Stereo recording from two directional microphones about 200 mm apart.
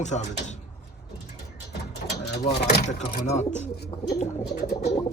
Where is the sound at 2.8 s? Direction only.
35° left (ahead or behind).